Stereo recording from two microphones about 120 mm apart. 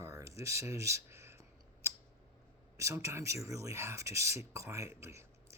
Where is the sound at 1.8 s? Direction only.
20° right (ahead or behind).